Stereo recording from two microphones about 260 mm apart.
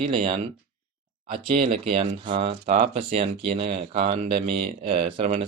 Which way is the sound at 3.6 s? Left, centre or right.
Right.